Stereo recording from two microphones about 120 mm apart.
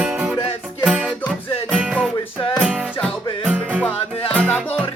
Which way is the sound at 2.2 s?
45° left (ahead or behind).